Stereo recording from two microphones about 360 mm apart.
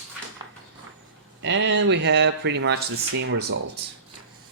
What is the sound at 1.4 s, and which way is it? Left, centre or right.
Speech, right.